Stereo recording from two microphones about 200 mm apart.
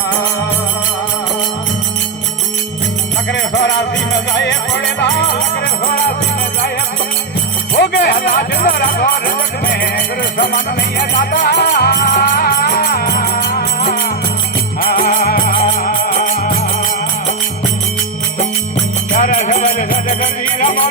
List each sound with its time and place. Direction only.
3.3 s music: 60° left (ahead or behind)
4.9 s music: 60° left (ahead or behind)
5.8 s music: 50° left (ahead or behind)
7.8 s music: 55° left (ahead or behind)
19.1 s music: 40° left (ahead or behind)